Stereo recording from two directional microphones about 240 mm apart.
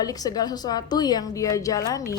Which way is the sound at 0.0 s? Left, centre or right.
Centre.